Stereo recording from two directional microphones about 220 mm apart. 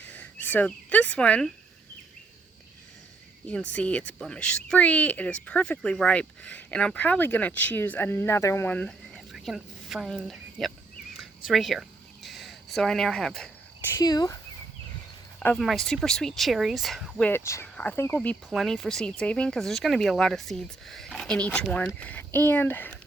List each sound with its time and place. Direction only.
0.0 s speech: 5° left (ahead or behind)
3.4 s speech: 5° left (ahead or behind)
11.1 s a sound: centre (ahead or behind)
13.9 s speech: 15° left (ahead or behind)
15.4 s speech: 5° left (ahead or behind)